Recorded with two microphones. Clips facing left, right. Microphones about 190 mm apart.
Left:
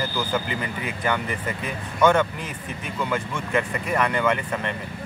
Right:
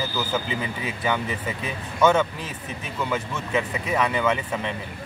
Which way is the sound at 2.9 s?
5° right (ahead or behind).